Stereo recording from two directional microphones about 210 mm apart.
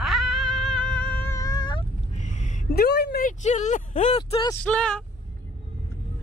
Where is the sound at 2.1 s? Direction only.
35° left (ahead or behind).